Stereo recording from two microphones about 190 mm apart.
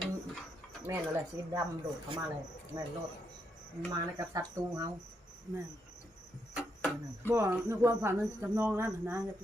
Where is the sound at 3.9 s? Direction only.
20° right (ahead or behind).